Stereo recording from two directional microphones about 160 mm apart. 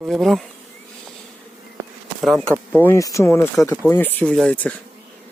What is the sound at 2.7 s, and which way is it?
Speech, 15° left (ahead or behind).